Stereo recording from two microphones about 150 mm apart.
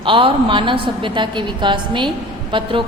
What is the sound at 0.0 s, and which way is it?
A woman's voice, 35° right (ahead or behind).